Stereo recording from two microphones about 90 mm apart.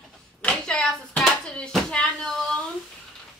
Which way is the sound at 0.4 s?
10° left (ahead or behind).